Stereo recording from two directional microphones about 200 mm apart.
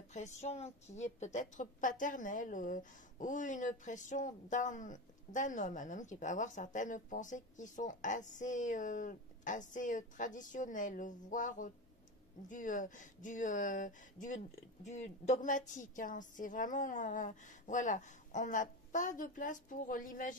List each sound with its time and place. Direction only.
0.1 s a woman's voice: 35° left (ahead or behind)